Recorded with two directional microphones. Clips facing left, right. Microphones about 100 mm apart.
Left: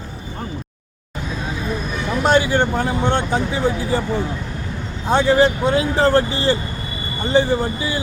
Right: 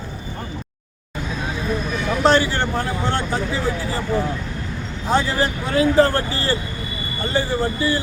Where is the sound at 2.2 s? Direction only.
15° left (ahead or behind).